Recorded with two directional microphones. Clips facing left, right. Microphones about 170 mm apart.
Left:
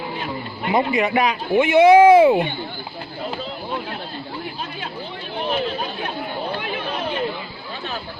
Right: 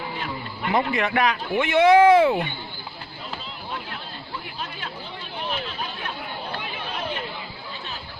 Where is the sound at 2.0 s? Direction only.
15° left (ahead or behind).